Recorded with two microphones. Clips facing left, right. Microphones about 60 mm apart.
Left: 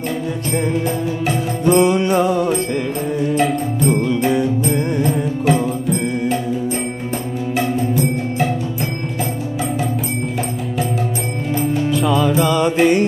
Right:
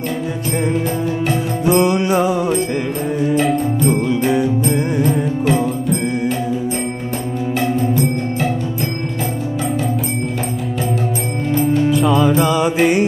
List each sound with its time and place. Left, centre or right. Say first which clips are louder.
0.6 s music: right 1 dB; centre
11.5 s music: right 3 dB; centre